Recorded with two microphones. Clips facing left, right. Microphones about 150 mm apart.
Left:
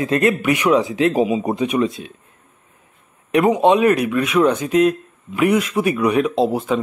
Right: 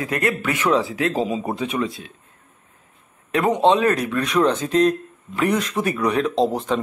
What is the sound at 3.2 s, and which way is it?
A man's voice, 20° left (ahead or behind).